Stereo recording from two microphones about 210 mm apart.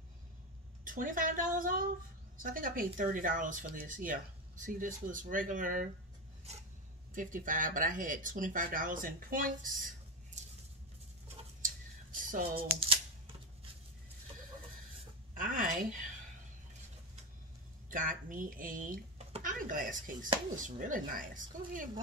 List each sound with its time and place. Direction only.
0.8 s speech: 40° right (ahead or behind)
7.2 s speech: 40° right (ahead or behind)
10.4 s a sound: 35° right (ahead or behind)
11.6 s a sound: 40° right (ahead or behind)
12.4 s speech: 25° right (ahead or behind)
15.3 s a woman's voice: 40° right (ahead or behind)
17.8 s speech: 40° right (ahead or behind)